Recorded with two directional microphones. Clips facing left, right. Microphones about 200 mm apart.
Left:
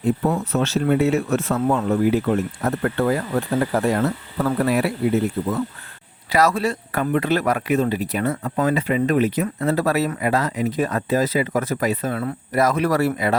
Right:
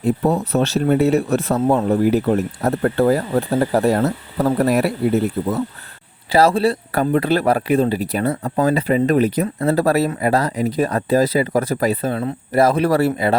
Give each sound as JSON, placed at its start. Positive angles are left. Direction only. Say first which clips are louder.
{"t": 0.0, "sound": "speech", "louder": "right 3 dB", "side_deg": -35}